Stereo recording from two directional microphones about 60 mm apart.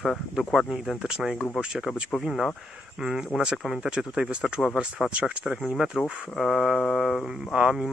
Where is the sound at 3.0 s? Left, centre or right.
Centre.